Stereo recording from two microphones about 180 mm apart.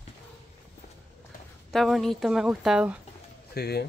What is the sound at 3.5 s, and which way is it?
Speech, 60° left (ahead or behind).